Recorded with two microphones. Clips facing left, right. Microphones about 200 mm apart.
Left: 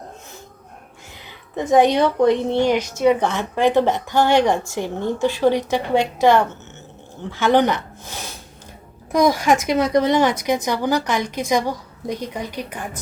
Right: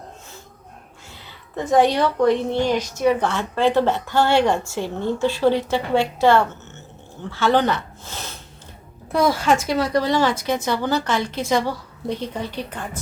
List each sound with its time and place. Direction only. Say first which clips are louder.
1.5 s a woman's voice: left 2 dB; 20° left (ahead or behind)